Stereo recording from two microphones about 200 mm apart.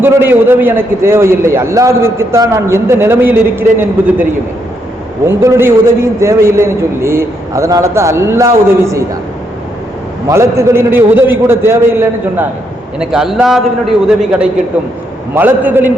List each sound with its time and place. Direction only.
0.0 s a man's voice: 10° right (ahead or behind)
10.2 s a man's voice: 15° right (ahead or behind)